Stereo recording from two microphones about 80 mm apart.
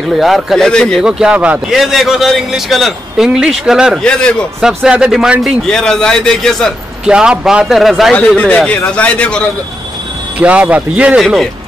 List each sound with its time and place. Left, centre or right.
0.2 s a man's voice: centre
1.0 s speech: centre
1.7 s speech: centre
4.0 s a man's voice: centre
4.6 s speech: centre
5.7 s a man's voice: centre
7.1 s speech: centre
8.1 s a man's voice: centre
10.4 s speech: centre